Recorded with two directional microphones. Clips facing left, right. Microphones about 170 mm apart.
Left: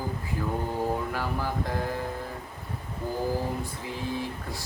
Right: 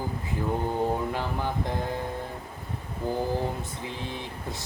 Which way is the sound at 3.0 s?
25° right (ahead or behind).